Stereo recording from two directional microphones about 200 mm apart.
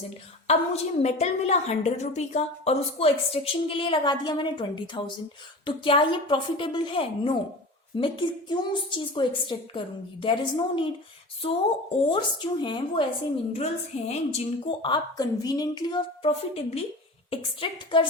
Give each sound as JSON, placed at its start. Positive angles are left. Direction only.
{"t": 0.4, "sound": "a woman's voice", "side_deg": 30}